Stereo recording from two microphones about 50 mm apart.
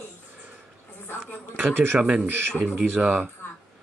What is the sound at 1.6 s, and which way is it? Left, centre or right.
Speech, right.